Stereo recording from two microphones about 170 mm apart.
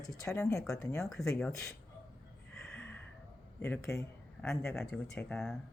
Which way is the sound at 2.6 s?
5° left (ahead or behind).